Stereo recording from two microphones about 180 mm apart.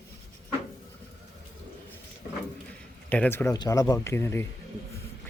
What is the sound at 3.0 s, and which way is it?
Speech, 10° left (ahead or behind).